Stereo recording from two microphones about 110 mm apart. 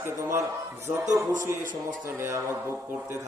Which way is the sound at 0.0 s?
30° right (ahead or behind).